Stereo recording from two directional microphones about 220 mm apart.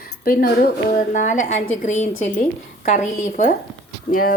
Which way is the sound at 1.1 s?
35° left (ahead or behind).